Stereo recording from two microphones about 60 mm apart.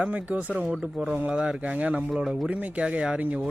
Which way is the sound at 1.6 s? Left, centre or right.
Right.